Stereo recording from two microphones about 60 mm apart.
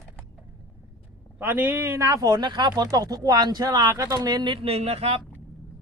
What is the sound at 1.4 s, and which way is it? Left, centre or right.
Speech, right.